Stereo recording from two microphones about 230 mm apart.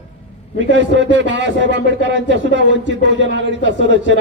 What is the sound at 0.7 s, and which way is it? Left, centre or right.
A man's voice, right.